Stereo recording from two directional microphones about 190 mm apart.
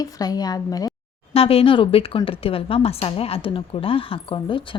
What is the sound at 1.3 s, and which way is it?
Speech, 30° left (ahead or behind).